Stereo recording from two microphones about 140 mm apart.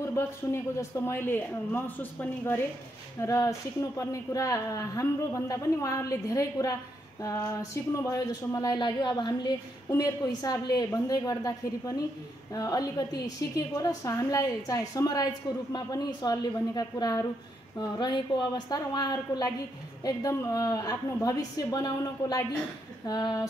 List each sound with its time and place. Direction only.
0.0 s speech: 20° left (ahead or behind)